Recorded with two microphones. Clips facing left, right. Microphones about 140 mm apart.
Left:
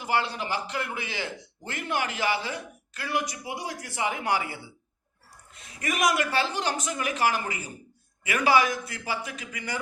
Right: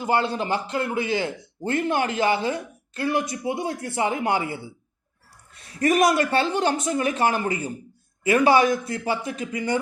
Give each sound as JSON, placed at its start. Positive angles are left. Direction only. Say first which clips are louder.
{"t": 0.0, "sound": "speech", "louder": "right 5 dB", "side_deg": -30}
{"t": 5.8, "sound": "speech", "louder": "right 7 dB", "side_deg": -30}